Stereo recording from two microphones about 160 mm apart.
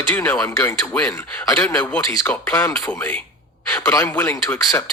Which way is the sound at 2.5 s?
20° left (ahead or behind).